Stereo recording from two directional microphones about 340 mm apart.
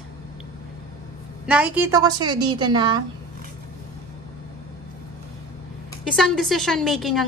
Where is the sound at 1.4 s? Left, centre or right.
Centre.